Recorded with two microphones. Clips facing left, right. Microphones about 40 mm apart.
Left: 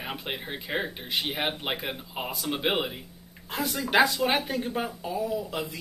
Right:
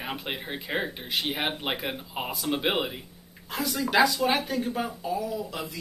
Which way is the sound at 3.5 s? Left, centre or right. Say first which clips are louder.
Even; centre.